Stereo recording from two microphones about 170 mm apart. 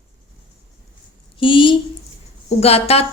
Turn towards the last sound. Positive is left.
turn(degrees=35)  # may be behind; listen again after turning